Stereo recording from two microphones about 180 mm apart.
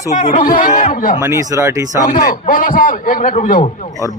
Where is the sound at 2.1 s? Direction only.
50° left (ahead or behind).